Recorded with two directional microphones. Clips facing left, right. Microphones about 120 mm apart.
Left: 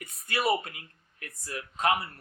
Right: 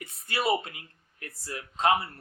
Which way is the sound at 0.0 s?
25° right (ahead or behind).